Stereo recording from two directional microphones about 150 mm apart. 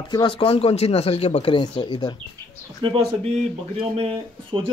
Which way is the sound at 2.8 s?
35° right (ahead or behind).